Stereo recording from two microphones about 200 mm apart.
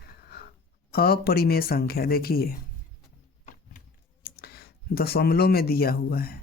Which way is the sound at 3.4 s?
40° left (ahead or behind).